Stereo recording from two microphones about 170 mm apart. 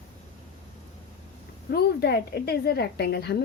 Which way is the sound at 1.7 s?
70° left (ahead or behind).